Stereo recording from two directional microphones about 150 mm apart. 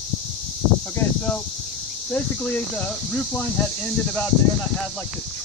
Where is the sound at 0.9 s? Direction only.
10° left (ahead or behind).